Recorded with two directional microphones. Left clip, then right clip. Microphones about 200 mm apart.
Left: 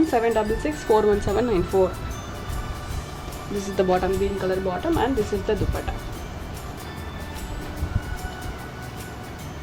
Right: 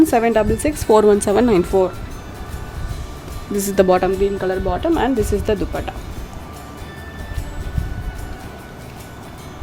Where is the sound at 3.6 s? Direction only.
60° right (ahead or behind).